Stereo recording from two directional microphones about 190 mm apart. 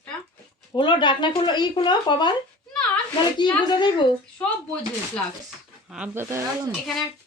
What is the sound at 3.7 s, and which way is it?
Speech, 25° left (ahead or behind).